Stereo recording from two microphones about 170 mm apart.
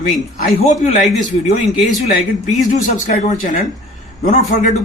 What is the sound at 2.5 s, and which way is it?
A man's voice, 45° left (ahead or behind).